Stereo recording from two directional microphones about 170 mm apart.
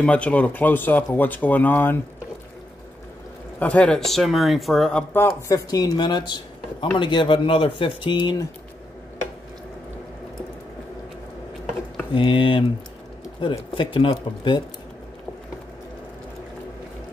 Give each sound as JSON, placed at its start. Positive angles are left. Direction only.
{"t": 0.0, "sound": "speech", "side_deg": 10}
{"t": 3.5, "sound": "speech", "side_deg": 10}
{"t": 5.1, "sound": "speech", "side_deg": 10}
{"t": 12.1, "sound": "speech", "side_deg": 30}